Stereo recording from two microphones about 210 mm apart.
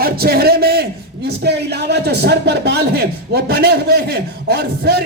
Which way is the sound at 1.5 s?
50° right (ahead or behind).